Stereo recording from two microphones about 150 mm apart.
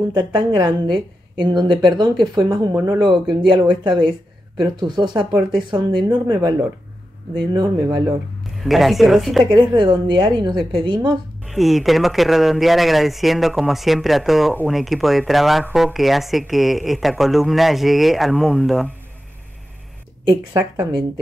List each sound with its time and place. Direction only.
0.1 s a woman's voice: 30° right (ahead or behind)
8.6 s speech: centre (ahead or behind)
9.5 s a woman's voice: 30° right (ahead or behind)
11.4 s speech: centre (ahead or behind)
20.2 s a woman's voice: 30° right (ahead or behind)